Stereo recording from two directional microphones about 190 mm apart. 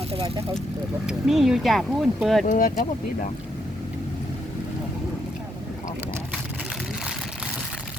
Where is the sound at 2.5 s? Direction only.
45° left (ahead or behind).